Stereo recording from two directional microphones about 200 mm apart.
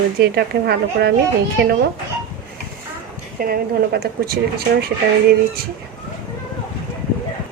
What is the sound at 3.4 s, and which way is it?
Speech, 50° right (ahead or behind).